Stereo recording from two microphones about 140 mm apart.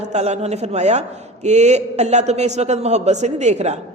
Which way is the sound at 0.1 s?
50° right (ahead or behind).